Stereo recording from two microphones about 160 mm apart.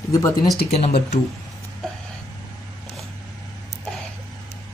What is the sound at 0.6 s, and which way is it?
Speech, 40° left (ahead or behind).